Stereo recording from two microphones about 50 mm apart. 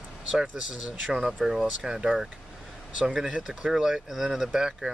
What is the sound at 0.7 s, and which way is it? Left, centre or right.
Speech, centre.